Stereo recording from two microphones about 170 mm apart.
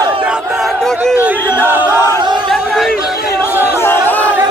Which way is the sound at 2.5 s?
Centre (ahead or behind).